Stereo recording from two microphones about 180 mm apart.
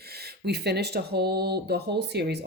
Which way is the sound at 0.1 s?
60° right (ahead or behind).